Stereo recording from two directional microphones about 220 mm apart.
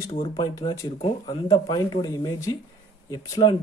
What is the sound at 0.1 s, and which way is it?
Speech, 20° left (ahead or behind).